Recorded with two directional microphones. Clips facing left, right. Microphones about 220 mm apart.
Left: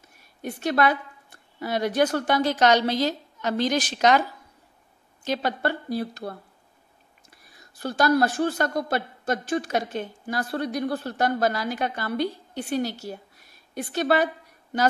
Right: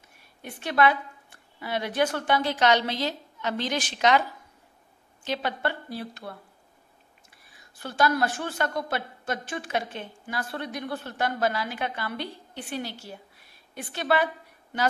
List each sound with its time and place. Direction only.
0.4 s speech: 40° left (ahead or behind)
5.2 s a woman's voice: 40° left (ahead or behind)